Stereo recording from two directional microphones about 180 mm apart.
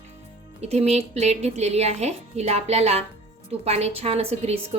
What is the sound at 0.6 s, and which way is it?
A woman's voice, 35° right (ahead or behind).